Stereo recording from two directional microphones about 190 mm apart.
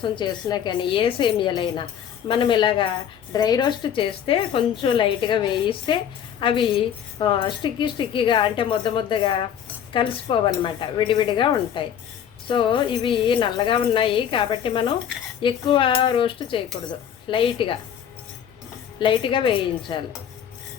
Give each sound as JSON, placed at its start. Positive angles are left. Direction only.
{"t": 0.0, "sound": "speech", "side_deg": 25}
{"t": 18.9, "sound": "speech", "side_deg": 25}